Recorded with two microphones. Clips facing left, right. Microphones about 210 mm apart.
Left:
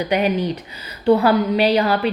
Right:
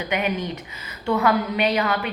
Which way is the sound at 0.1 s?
35° left (ahead or behind).